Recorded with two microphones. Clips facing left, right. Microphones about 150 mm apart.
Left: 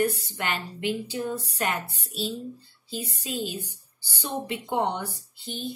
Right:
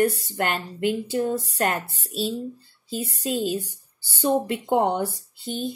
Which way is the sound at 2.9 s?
45° right (ahead or behind).